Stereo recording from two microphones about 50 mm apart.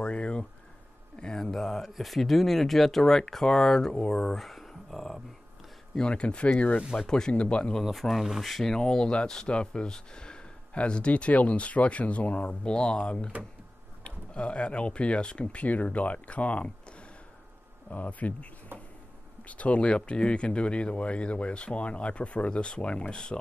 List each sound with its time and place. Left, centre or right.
0.0 s speech: left
4.4 s a sound: centre
5.9 s speech: centre
6.8 s speech: centre
7.1 s speech: centre
7.8 s speech: centre; by 18.5 s left
18.7 s cupboard open or close: right
19.4 s speech: left